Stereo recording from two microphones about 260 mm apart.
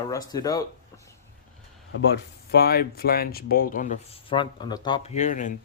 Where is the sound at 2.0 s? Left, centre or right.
Left.